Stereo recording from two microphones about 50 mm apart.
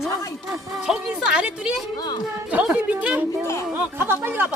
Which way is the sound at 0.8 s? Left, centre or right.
Centre.